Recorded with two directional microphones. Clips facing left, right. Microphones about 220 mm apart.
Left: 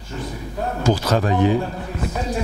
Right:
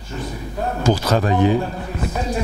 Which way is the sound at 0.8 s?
10° right (ahead or behind).